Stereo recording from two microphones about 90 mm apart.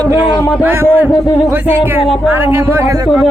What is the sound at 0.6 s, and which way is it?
Speech, 25° right (ahead or behind).